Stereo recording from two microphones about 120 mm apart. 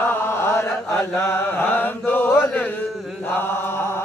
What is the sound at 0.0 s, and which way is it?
Chant, 15° left (ahead or behind).